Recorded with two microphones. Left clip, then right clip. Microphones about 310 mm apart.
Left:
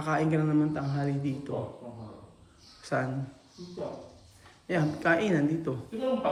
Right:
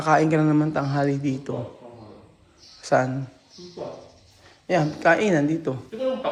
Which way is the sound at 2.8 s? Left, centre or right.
Centre.